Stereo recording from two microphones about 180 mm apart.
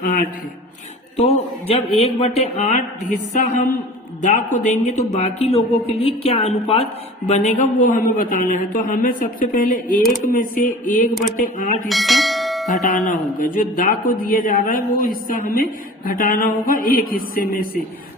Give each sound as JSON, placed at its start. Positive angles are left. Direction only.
{"t": 0.0, "sound": "a man's voice", "side_deg": 50}
{"t": 1.1, "sound": "a man's voice", "side_deg": 35}
{"t": 4.2, "sound": "a man's voice", "side_deg": 45}
{"t": 11.9, "sound": "bell", "side_deg": 0}
{"t": 13.1, "sound": "a man's voice", "side_deg": 45}